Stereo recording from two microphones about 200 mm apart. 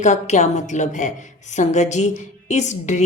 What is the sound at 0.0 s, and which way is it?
A woman's voice, 35° left (ahead or behind).